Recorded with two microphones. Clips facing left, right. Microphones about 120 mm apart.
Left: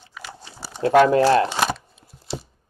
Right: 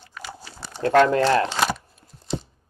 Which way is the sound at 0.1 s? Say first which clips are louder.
Right 1 dB; centre (ahead or behind).